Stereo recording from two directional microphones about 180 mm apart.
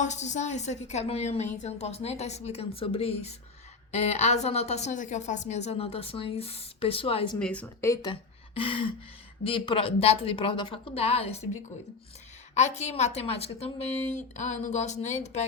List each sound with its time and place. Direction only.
0.0 s a woman's voice: 40° left (ahead or behind)
7.3 s speech: 5° left (ahead or behind)
8.1 s a woman's voice: 30° left (ahead or behind)
12.5 s a woman's voice: 40° left (ahead or behind)